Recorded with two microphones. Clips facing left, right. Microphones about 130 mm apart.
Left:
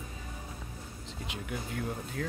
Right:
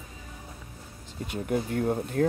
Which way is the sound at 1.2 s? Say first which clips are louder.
Right 11 dB; 45° right (ahead or behind).